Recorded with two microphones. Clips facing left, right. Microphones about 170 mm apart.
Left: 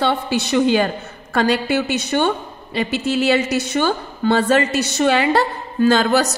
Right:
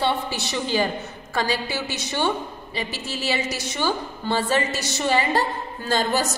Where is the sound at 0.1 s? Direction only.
65° left (ahead or behind).